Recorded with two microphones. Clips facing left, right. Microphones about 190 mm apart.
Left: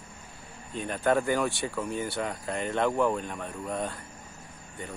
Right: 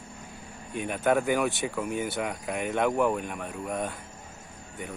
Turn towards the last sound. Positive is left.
turn(degrees=-5)  # may be behind; listen again after turning